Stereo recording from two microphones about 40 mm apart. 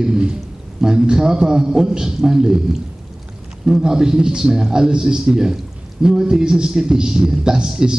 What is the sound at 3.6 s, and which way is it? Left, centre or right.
A man's voice, centre.